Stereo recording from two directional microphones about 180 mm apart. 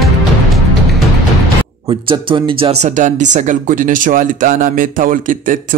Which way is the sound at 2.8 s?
40° right (ahead or behind).